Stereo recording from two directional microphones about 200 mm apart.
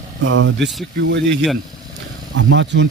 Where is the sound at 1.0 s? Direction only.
65° right (ahead or behind).